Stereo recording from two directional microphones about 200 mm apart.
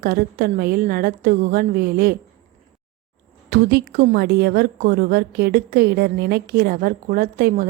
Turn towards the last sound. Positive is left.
turn(degrees=-45)  # may be behind; listen again after turning